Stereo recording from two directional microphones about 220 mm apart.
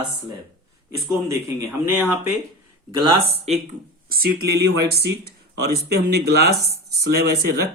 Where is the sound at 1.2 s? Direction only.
10° right (ahead or behind).